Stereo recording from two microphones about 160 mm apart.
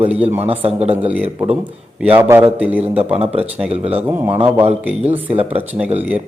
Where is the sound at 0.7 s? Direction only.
40° right (ahead or behind).